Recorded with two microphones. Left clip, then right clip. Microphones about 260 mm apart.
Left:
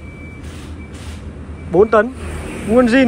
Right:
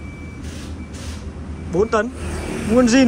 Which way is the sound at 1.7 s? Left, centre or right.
Centre.